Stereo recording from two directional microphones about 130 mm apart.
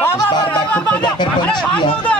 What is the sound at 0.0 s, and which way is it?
Music, 20° left (ahead or behind).